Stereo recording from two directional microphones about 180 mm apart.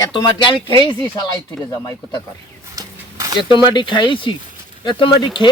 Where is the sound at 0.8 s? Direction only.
30° right (ahead or behind).